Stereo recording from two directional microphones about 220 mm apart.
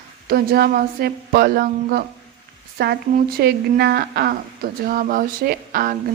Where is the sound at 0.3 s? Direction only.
45° right (ahead or behind).